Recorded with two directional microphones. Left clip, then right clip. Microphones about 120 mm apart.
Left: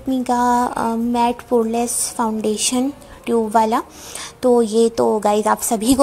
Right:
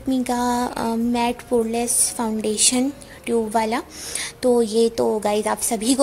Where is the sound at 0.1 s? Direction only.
15° left (ahead or behind).